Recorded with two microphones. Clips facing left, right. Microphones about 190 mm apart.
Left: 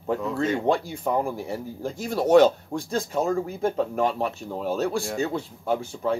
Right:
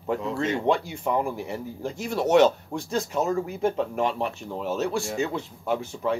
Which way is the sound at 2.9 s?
50° left (ahead or behind).